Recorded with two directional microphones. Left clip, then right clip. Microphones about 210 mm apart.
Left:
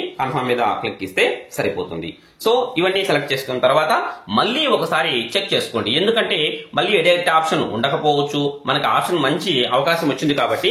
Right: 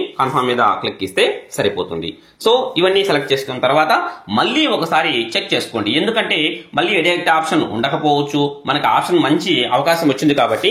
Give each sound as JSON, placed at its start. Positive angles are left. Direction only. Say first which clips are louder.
{"t": 1.1, "sound": "speech", "louder": "right 2 dB", "side_deg": -15}
{"t": 10.0, "sound": "speech", "louder": "right 4 dB", "side_deg": -25}